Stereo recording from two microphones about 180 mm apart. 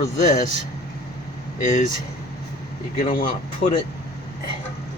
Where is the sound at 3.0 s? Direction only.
45° left (ahead or behind).